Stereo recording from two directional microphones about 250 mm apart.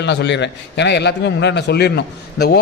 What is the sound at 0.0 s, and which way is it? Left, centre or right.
A man's voice, left.